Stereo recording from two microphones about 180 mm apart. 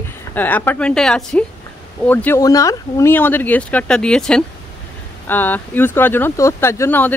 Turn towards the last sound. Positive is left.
turn(degrees=10)  # may be behind; listen again after turning